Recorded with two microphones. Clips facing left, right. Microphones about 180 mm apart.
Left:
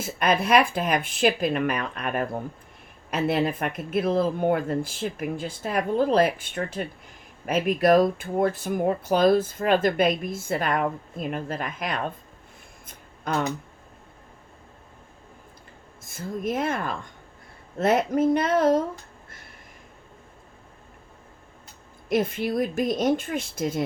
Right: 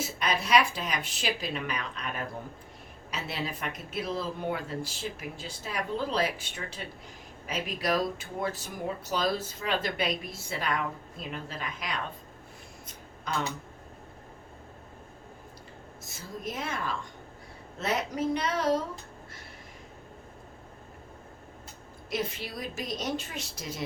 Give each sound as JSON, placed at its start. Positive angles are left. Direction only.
{"t": 0.0, "sound": "speech", "side_deg": 55}
{"t": 12.9, "sound": "a sound", "side_deg": 50}
{"t": 16.0, "sound": "speech", "side_deg": 55}
{"t": 22.1, "sound": "speech", "side_deg": 50}